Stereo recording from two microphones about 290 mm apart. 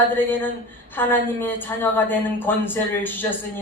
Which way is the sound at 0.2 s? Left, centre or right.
Centre.